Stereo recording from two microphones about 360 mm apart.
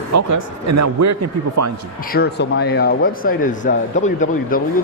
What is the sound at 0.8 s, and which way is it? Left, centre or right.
Speech, right.